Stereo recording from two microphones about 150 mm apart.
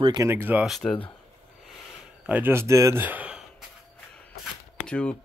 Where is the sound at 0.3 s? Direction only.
15° right (ahead or behind).